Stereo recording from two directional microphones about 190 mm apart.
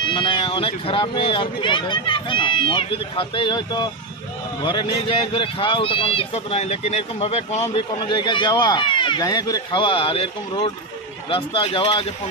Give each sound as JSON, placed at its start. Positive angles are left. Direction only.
{"t": 0.0, "sound": "speech", "side_deg": 25}